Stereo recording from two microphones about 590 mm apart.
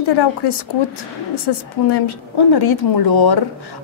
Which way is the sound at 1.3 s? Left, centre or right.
Left.